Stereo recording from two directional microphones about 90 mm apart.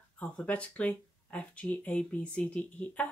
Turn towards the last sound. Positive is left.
turn(degrees=15)  # may be behind; listen again after turning